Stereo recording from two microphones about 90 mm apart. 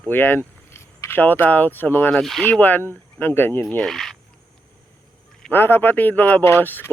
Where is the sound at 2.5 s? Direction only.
20° left (ahead or behind).